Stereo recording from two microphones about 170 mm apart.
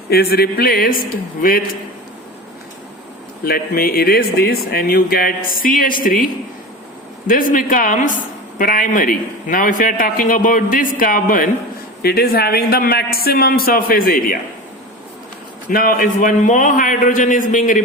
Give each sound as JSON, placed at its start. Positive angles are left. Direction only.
{"t": 0.1, "sound": "speech", "side_deg": 65}
{"t": 3.4, "sound": "speech", "side_deg": 60}
{"t": 7.3, "sound": "a woman's voice", "side_deg": 50}
{"t": 12.0, "sound": "speech", "side_deg": 65}
{"t": 15.7, "sound": "a woman's voice", "side_deg": 55}